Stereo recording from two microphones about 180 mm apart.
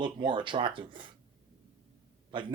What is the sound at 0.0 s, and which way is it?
Speech, 25° right (ahead or behind).